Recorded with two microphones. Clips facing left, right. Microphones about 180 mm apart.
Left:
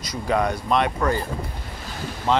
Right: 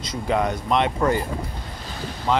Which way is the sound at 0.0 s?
25° right (ahead or behind).